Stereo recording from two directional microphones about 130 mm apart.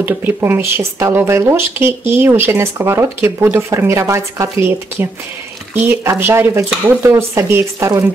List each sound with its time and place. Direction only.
0.0 s speech: 15° right (ahead or behind)
5.8 s speech: 15° right (ahead or behind)